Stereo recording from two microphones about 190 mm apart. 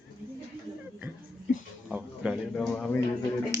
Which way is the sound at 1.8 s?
5° right (ahead or behind).